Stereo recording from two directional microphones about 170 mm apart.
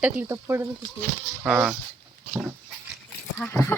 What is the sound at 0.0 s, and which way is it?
Speech, 15° right (ahead or behind).